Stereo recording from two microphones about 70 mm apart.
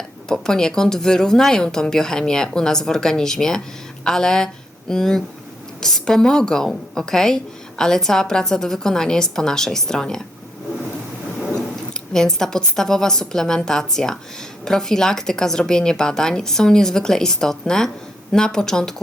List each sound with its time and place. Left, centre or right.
0.3 s a woman's voice: centre
12.1 s a woman's voice: centre